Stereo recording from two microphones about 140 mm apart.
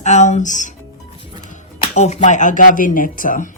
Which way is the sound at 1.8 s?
50° left (ahead or behind).